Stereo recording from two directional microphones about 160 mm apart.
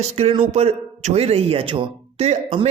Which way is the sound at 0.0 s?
40° right (ahead or behind).